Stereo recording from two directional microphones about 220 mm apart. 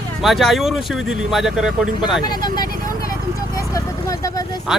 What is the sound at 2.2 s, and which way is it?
Speech, 20° left (ahead or behind).